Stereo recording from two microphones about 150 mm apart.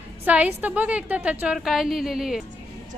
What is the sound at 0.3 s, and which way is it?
A woman's voice, 10° right (ahead or behind).